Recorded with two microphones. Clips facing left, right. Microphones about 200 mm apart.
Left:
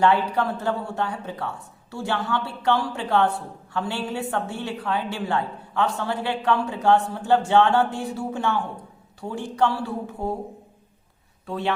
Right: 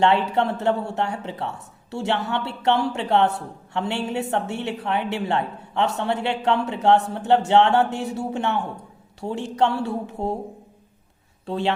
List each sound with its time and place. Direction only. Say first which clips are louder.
0.0 s speech: right 1 dB; 25° right (ahead or behind)
11.4 s a man's voice: right 3 dB; 30° right (ahead or behind)